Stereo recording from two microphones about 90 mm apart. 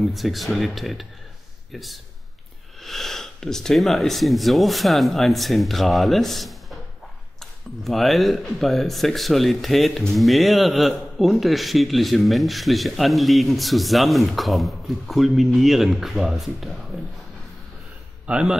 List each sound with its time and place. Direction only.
0.0 s speech: centre (ahead or behind)
7.8 s speech: centre (ahead or behind)
18.2 s a man's voice: 10° right (ahead or behind)